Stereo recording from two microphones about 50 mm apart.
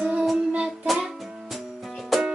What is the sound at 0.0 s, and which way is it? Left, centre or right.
Child singing, right.